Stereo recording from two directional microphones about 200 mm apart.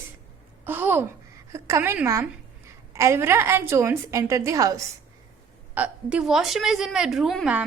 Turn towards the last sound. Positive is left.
turn(degrees=-5)  # may be behind; listen again after turning